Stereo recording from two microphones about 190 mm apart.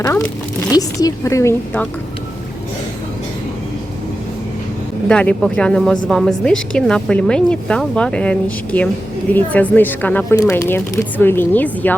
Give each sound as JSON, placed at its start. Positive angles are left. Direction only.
{"t": 0.0, "sound": "speech", "side_deg": 15}
{"t": 5.0, "sound": "speech", "side_deg": 5}